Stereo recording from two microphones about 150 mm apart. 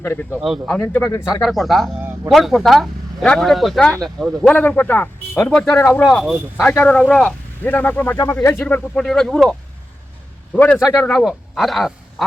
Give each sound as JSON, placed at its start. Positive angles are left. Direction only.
{"t": 0.0, "sound": "speech", "side_deg": 15}
{"t": 0.4, "sound": "speech", "side_deg": 0}
{"t": 1.0, "sound": "speech", "side_deg": 20}
{"t": 1.4, "sound": "speech", "side_deg": 0}
{"t": 2.0, "sound": "speech", "side_deg": -15}
{"t": 2.3, "sound": "speech", "side_deg": 0}
{"t": 6.0, "sound": "speech", "side_deg": 0}